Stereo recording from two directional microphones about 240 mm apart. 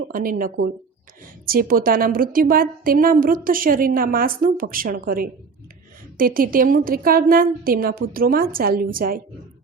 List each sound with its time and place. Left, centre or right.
0.1 s a woman's voice: right